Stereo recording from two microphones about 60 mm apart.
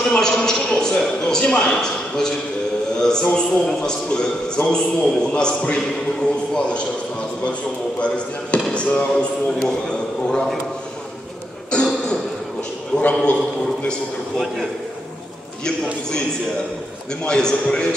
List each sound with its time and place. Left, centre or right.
0.0 s a man's voice: centre
8.0 s a man's voice: centre
11.7 s throat clearing: centre
13.1 s a man's voice: centre
17.2 s a man's voice: centre